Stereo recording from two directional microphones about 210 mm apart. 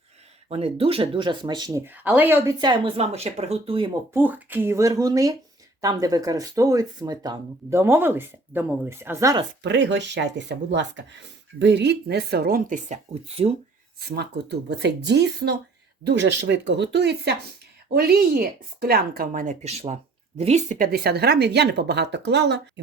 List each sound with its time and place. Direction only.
0.4 s speech: 30° right (ahead or behind); by 2.6 s 10° right (ahead or behind)
2.6 s speech: 20° right (ahead or behind)
4.1 s speech: 10° right (ahead or behind)
9.6 s speech: 60° right (ahead or behind); by 13.6 s 30° right (ahead or behind)
14.2 s speech: 50° right (ahead or behind)